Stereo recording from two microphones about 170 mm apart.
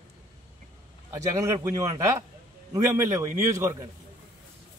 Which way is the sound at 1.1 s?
20° right (ahead or behind).